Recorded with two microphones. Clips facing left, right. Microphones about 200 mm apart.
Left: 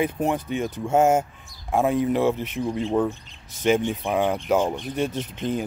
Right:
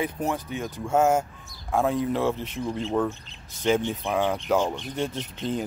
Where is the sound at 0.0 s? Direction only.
20° left (ahead or behind).